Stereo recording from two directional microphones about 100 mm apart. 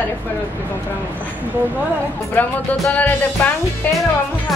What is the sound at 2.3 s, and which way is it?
Speech, 15° left (ahead or behind).